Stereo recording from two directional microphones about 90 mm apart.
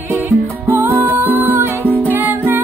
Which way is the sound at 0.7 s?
25° right (ahead or behind).